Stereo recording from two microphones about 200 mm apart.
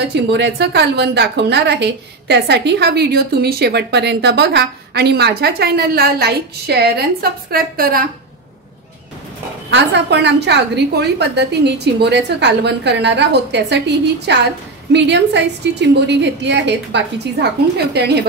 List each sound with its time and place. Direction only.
0.1 s a woman's voice: 55° right (ahead or behind)
9.7 s a woman's voice: 60° right (ahead or behind)